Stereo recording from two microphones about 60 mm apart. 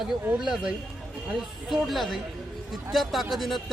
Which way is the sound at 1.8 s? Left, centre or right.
Centre.